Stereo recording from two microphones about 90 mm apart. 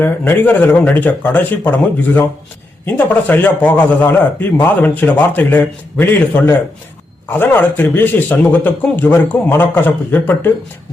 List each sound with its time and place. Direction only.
0.0 s a man's voice: 25° left (ahead or behind)
2.8 s a man's voice: 20° left (ahead or behind)